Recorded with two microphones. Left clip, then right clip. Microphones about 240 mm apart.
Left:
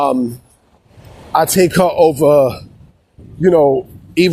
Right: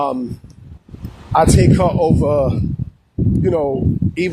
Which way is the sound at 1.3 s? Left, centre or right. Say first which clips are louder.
Left 1 dB; left.